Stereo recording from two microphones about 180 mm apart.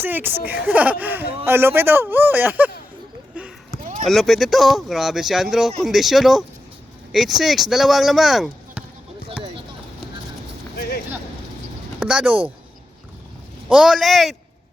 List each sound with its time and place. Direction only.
0.0 s speech: 10° right (ahead or behind)
3.3 s a sound: 5° right (ahead or behind)
4.0 s speech: centre (ahead or behind)
10.8 s a sound: 60° left (ahead or behind)
11.9 s speech: 5° right (ahead or behind)
13.7 s speech: 5° right (ahead or behind)